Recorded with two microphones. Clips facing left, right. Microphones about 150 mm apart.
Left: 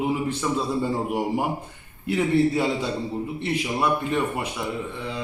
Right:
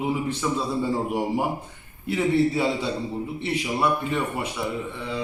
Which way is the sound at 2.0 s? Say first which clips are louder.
Left 1 dB; centre (ahead or behind).